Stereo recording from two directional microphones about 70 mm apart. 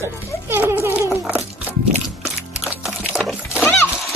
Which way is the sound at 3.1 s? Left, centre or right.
Centre.